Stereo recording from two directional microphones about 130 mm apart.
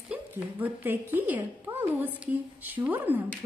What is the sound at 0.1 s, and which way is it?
A woman's voice, 15° right (ahead or behind).